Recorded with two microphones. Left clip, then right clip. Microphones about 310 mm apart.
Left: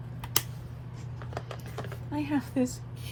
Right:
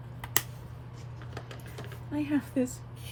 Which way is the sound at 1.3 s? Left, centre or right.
Centre.